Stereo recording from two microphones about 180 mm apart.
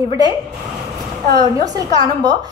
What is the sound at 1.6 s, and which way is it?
Speech, 20° right (ahead or behind).